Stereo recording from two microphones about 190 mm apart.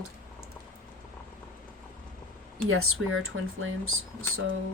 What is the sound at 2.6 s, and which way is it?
Speech, 90° right.